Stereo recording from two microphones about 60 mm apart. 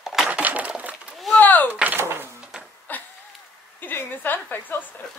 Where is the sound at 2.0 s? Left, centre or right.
Right.